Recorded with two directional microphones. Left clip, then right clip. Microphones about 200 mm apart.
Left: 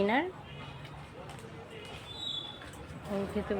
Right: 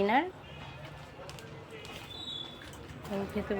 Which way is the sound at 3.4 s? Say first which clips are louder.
Right 1 dB; centre (ahead or behind).